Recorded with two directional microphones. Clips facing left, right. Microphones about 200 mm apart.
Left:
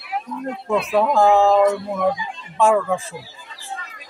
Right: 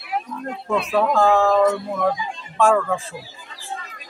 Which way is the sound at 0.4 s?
10° left (ahead or behind).